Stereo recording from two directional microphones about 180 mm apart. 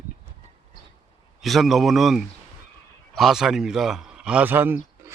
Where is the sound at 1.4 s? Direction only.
Centre (ahead or behind).